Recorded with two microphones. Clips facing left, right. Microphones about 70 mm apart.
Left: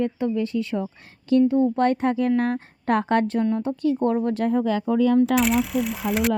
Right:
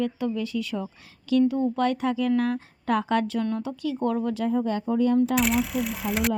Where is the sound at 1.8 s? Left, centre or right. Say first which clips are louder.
Left 3 dB; left.